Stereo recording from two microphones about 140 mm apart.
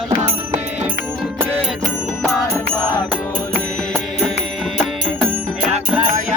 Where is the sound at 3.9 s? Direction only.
Centre (ahead or behind).